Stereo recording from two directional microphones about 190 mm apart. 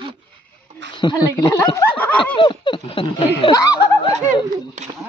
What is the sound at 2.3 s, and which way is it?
Speech, 25° left (ahead or behind).